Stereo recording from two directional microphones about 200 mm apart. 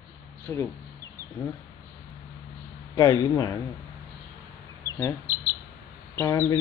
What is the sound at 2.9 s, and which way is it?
Speech, 15° left (ahead or behind).